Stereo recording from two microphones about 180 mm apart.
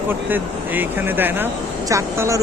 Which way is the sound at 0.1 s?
10° right (ahead or behind).